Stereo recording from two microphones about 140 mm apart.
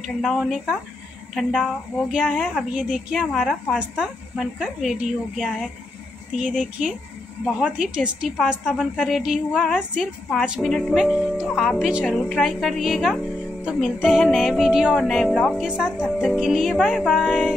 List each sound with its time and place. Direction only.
0.0 s a woman's voice: centre (ahead or behind)
2.7 s a woman's voice: 5° right (ahead or behind)
7.4 s a woman's voice: 5° right (ahead or behind)